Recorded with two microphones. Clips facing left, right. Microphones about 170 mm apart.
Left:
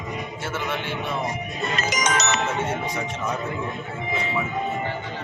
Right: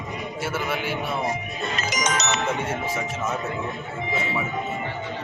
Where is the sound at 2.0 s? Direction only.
60° left (ahead or behind).